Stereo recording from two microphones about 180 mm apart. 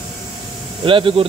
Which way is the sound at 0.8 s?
30° right (ahead or behind).